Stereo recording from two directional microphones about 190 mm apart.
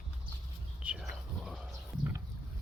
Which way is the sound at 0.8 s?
5° right (ahead or behind).